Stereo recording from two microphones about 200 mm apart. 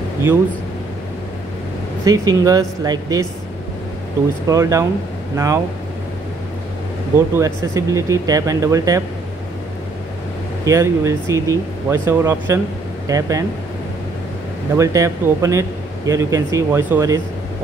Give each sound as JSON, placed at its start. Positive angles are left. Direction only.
{"t": 2.0, "sound": "speech", "side_deg": -20}
{"t": 4.5, "sound": "speech", "side_deg": -15}
{"t": 7.3, "sound": "speech", "side_deg": -15}
{"t": 10.6, "sound": "speech", "side_deg": -15}
{"t": 14.8, "sound": "speech", "side_deg": -15}